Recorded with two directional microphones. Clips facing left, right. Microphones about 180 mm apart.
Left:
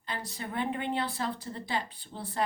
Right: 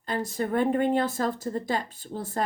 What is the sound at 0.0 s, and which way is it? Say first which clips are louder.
Speech: right 10 dB; 45° right (ahead or behind).